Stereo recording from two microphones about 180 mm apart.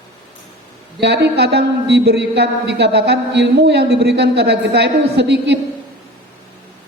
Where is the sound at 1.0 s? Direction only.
70° right (ahead or behind).